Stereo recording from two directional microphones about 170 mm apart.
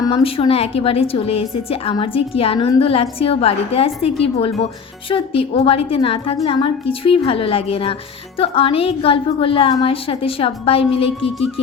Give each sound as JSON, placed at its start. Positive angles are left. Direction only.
{"t": 0.1, "sound": "a woman's voice", "side_deg": 35}